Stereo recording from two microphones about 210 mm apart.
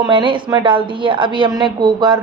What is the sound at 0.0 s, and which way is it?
A woman's voice, 25° right (ahead or behind).